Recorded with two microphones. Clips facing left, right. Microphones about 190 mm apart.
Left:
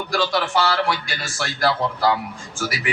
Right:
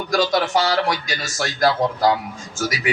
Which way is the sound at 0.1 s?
40° right (ahead or behind).